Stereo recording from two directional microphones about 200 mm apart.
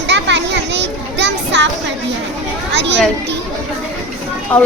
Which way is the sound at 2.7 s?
60° right (ahead or behind).